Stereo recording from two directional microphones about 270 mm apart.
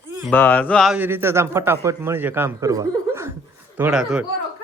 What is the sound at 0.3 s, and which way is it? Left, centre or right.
A man's voice, centre.